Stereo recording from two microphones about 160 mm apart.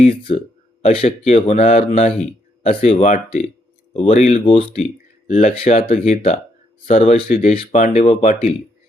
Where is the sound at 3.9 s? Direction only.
50° left (ahead or behind).